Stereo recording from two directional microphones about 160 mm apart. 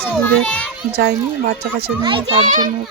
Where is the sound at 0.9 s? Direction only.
80° right.